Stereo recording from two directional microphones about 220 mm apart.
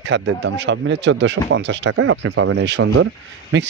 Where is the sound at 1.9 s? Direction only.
75° right (ahead or behind); by 2.9 s 55° right (ahead or behind).